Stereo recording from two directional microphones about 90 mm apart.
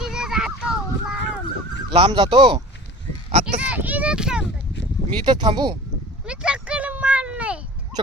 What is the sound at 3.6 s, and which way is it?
Speech, 15° right (ahead or behind).